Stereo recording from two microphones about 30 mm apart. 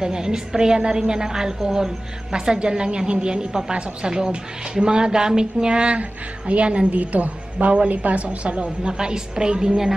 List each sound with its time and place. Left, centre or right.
0.0 s a woman's voice: right
6.9 s a woman's voice: right
7.6 s a woman's voice: right
7.9 s a woman's voice: right
8.8 s a woman's voice: right